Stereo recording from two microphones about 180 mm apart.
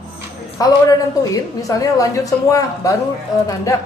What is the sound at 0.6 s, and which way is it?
A woman's voice, 20° left (ahead or behind).